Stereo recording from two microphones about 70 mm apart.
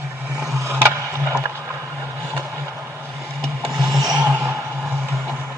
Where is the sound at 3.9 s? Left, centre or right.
Right.